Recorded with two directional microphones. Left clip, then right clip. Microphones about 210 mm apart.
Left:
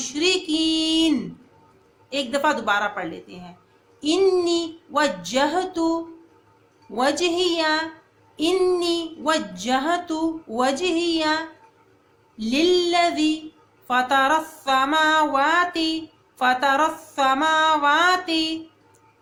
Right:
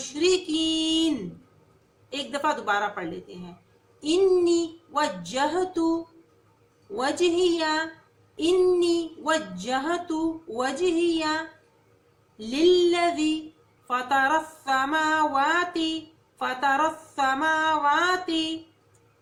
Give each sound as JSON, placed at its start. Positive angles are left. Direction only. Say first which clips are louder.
{"t": 0.1, "sound": "music", "louder": "left 2 dB", "side_deg": 50}
{"t": 2.0, "sound": "speech", "louder": "left 5 dB", "side_deg": 50}
{"t": 6.9, "sound": "speech", "louder": "left 3 dB", "side_deg": 50}